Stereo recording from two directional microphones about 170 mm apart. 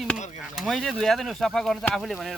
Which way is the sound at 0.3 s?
Centre (ahead or behind).